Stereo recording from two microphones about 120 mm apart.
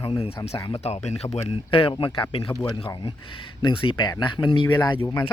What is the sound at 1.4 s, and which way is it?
Speech, 50° left (ahead or behind).